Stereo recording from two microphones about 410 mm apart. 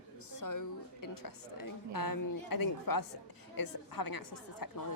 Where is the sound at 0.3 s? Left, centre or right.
Left.